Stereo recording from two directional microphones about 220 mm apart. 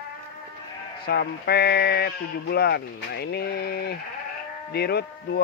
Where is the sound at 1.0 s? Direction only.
45° left (ahead or behind).